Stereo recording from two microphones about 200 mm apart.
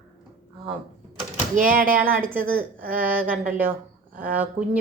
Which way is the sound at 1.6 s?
45° right (ahead or behind).